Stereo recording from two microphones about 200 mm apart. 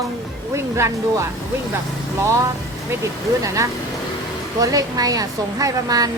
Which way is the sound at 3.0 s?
15° right (ahead or behind).